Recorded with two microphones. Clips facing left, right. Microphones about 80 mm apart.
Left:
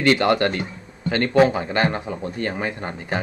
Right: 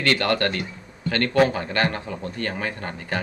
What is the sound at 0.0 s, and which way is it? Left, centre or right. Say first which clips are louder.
A man's voice: left 4 dB; centre.